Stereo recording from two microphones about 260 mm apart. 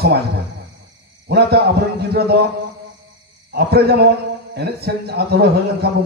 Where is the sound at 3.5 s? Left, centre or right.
Right.